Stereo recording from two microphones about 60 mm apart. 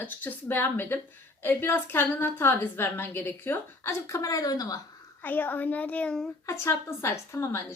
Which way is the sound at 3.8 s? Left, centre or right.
Left.